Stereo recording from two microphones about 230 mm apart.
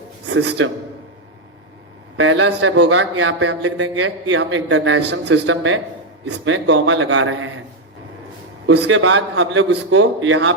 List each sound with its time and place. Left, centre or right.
0.4 s a man's voice: right
2.1 s a man's voice: right
5.3 s a man's voice: right
8.6 s a man's voice: right